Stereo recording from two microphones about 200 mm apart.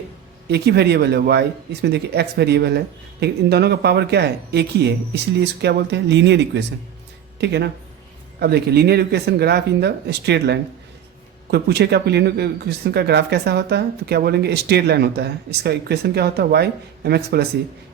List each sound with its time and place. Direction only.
0.4 s a man's voice: 55° right (ahead or behind)